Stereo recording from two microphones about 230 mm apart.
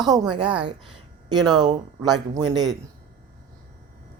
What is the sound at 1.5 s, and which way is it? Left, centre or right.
A woman's voice, centre.